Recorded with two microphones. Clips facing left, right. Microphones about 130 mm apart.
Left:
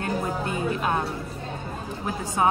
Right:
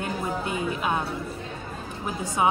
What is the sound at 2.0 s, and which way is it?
Speech, 15° right (ahead or behind).